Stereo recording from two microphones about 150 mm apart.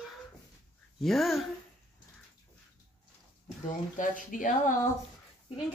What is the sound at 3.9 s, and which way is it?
Speech, 60° left (ahead or behind).